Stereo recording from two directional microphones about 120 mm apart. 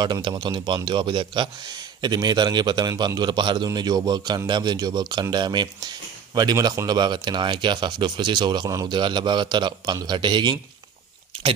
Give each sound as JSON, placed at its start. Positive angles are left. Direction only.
{"t": 0.0, "sound": "speech", "side_deg": -35}